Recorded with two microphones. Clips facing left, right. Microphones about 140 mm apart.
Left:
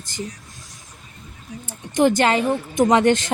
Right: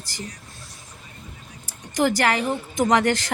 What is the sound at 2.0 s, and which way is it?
Speech, 20° left (ahead or behind).